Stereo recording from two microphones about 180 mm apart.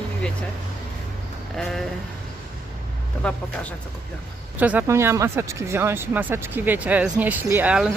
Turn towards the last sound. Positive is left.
turn(degrees=-5)  # may be behind; listen again after turning